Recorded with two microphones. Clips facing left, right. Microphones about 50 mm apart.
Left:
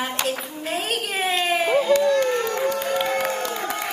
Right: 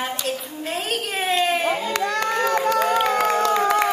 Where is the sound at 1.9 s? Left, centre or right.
Right.